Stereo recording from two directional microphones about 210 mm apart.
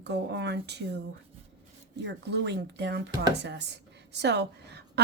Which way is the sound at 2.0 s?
55° right (ahead or behind).